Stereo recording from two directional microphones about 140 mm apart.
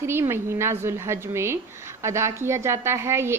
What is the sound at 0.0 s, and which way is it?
A woman's voice, 15° right (ahead or behind).